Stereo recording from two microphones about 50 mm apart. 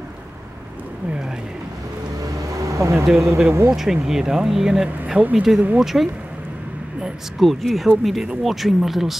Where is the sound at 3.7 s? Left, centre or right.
Centre.